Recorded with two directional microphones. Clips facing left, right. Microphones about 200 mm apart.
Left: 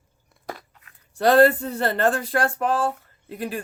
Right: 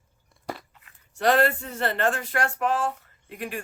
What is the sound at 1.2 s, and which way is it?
Speech, 35° left (ahead or behind).